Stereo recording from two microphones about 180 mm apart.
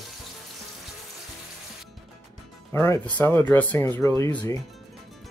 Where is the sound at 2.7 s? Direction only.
15° left (ahead or behind).